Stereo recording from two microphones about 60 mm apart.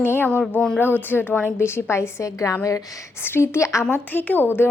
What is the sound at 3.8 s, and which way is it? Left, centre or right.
Speech, left.